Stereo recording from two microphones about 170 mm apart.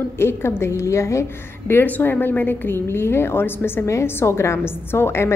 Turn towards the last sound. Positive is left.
turn(degrees=15)  # may be behind; listen again after turning